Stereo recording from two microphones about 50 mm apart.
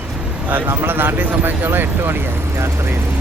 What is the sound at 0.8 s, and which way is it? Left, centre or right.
Speech, right.